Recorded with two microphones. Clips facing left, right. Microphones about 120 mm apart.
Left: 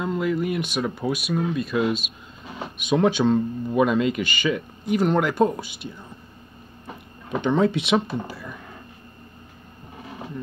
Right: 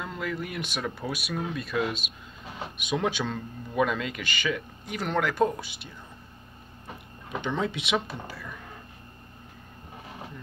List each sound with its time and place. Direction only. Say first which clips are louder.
0.0 s a sound: left 9 dB; 15° left (ahead or behind); by 1.3 s centre (ahead or behind)
1.3 s speech: left 5 dB; 10° left (ahead or behind)
2.8 s speech: left 8 dB; 40° left (ahead or behind)
3.1 s speech: left 11 dB; 25° left (ahead or behind)
7.4 s speech: left 9 dB; 40° left (ahead or behind)
8.1 s speech: left 8 dB; 20° left (ahead or behind)